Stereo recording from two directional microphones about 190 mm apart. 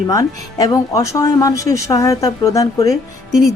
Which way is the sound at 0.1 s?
20° left (ahead or behind).